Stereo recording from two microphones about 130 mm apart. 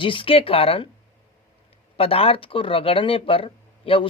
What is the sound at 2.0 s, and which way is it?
Speech, 45° left (ahead or behind).